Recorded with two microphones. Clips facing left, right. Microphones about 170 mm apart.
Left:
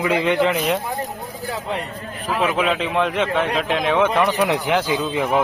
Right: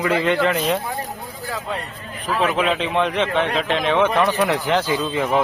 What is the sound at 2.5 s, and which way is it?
A man's voice, 5° left (ahead or behind).